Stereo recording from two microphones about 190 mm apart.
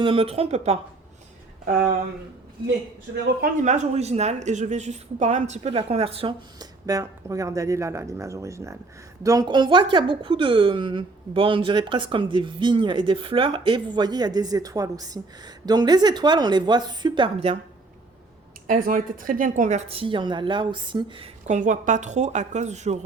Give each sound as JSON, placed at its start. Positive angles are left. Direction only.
{"t": 0.0, "sound": "a woman's voice", "side_deg": -30}
{"t": 3.4, "sound": "a woman's voice", "side_deg": -40}
{"t": 18.7, "sound": "speech", "side_deg": -45}
{"t": 21.4, "sound": "a woman's voice", "side_deg": -40}